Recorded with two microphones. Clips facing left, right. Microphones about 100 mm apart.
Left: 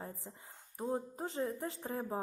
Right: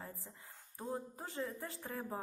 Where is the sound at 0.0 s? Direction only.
25° left (ahead or behind).